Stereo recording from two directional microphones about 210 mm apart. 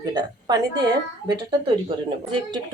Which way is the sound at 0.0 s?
20° right (ahead or behind).